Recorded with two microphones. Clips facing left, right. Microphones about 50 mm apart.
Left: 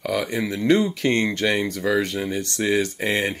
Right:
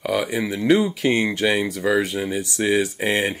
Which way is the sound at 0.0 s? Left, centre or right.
Centre.